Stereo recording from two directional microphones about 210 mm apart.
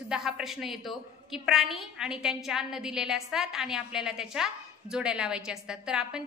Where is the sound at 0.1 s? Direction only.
Centre (ahead or behind).